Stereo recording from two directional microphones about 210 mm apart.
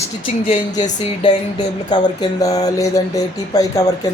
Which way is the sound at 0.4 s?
30° left (ahead or behind).